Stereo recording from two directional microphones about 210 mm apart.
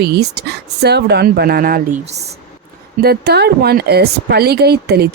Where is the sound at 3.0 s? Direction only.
50° right (ahead or behind).